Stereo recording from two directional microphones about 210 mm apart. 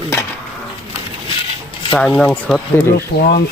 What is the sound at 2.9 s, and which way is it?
Speech, 45° left (ahead or behind).